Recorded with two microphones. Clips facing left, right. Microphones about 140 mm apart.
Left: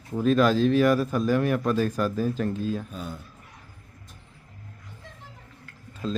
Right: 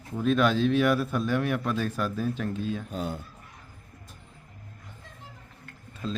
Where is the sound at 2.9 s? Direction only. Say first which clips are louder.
Right 4 dB; 65° right (ahead or behind).